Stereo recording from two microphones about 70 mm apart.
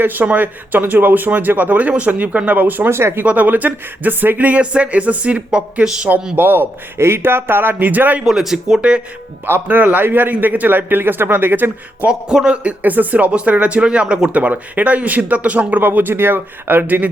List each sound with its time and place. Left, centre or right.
0.0 s speech: right
3.2 s speech: right
6.3 s a man's voice: right
8.2 s speech: centre
9.6 s speech: right
12.0 s speech: centre
12.8 s speech: right